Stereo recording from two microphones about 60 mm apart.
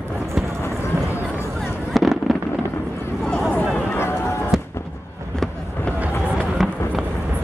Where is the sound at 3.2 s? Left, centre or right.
Centre.